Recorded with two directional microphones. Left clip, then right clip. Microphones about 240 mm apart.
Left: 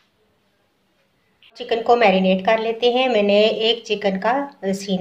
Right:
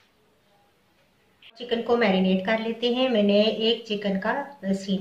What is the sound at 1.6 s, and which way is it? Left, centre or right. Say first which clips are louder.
A woman's voice: left 7 dB; left.